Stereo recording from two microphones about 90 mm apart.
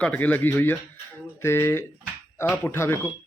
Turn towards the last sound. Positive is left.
turn(degrees=30)  # may be behind; listen again after turning